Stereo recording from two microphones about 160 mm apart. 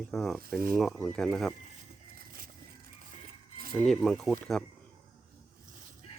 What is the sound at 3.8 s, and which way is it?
Speech, 5° left (ahead or behind).